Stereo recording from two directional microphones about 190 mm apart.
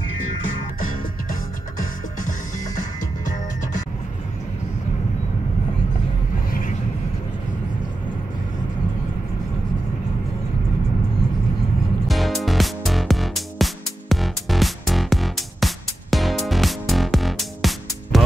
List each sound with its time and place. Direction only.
12.1 s music: centre (ahead or behind)